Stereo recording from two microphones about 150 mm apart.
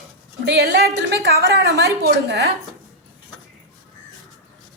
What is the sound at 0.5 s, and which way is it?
A woman's voice, 90° right.